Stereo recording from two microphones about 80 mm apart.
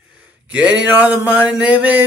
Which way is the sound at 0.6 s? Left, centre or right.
Centre.